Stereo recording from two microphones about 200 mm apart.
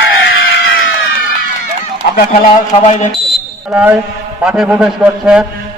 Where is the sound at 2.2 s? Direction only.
45° left (ahead or behind).